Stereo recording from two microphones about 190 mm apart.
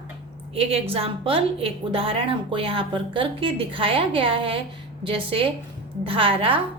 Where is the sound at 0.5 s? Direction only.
30° right (ahead or behind).